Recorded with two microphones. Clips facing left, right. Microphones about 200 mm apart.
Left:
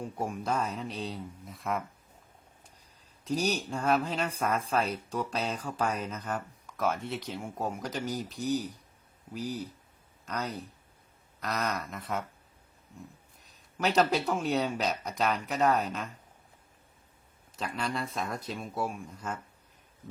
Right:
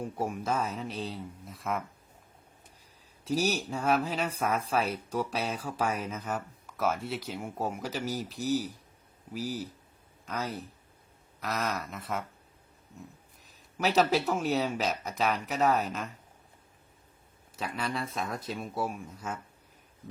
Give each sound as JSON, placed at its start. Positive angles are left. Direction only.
{"t": 0.0, "sound": "speech", "side_deg": -5}
{"t": 3.2, "sound": "speech", "side_deg": -5}
{"t": 13.7, "sound": "speech", "side_deg": -5}
{"t": 17.6, "sound": "speech", "side_deg": -5}